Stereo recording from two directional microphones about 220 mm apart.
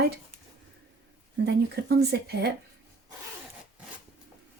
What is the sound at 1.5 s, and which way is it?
Speech, 50° right (ahead or behind).